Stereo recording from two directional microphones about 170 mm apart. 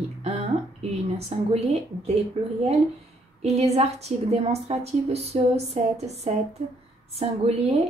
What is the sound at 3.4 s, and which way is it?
A woman's voice, 40° right (ahead or behind).